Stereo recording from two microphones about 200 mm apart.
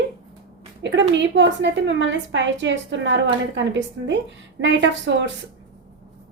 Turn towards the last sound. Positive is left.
turn(degrees=-65)  # may be behind; listen again after turning